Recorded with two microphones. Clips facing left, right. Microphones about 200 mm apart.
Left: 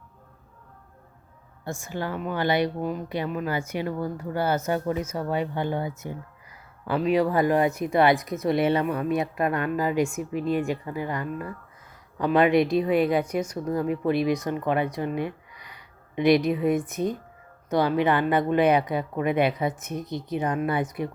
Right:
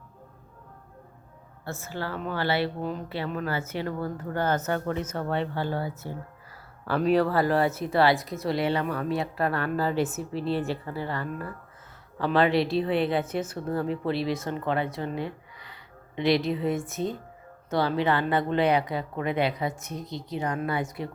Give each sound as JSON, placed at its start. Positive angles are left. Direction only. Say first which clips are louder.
{"t": 1.6, "sound": "a woman's voice", "louder": "left 3 dB", "side_deg": 15}
{"t": 7.1, "sound": "a woman's voice", "louder": "left 1 dB", "side_deg": 15}